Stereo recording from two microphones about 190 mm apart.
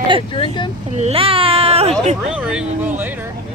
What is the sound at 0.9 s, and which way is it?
Speech, 30° right (ahead or behind).